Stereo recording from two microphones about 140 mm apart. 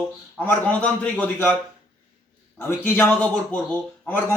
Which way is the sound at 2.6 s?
15° left (ahead or behind).